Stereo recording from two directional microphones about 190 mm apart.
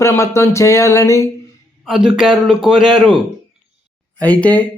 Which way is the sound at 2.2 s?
5° right (ahead or behind).